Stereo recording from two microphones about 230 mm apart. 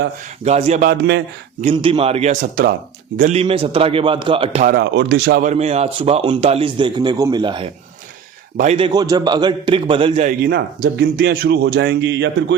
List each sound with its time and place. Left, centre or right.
0.4 s a man's voice: right
1.6 s a man's voice: right
4.6 s speech: right
5.5 s a man's voice: right
10.4 s speech: right